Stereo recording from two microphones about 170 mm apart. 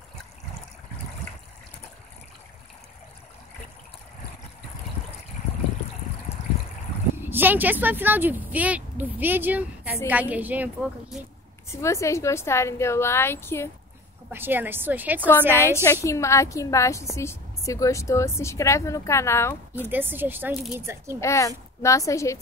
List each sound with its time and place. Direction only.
7.2 s speech: 10° right (ahead or behind)
11.7 s a woman's voice: 15° left (ahead or behind)
14.3 s speech: 10° right (ahead or behind)
15.6 s a woman's voice: 15° left (ahead or behind)
19.9 s speech: 10° right (ahead or behind)
21.2 s a woman's voice: 20° left (ahead or behind)